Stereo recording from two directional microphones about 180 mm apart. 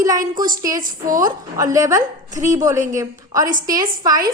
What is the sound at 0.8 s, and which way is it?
Speech, 50° right (ahead or behind).